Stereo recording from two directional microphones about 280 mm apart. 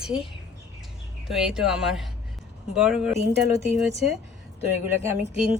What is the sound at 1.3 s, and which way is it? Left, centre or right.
A woman's voice, centre.